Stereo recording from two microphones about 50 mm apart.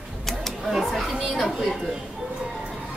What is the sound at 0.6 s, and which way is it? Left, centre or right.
A child's voice, centre.